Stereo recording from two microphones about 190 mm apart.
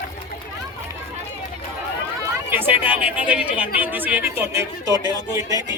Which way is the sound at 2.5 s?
10° right (ahead or behind).